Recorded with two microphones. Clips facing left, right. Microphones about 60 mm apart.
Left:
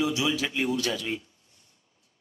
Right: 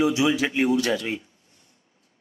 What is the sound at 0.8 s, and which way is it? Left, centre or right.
Speech, right.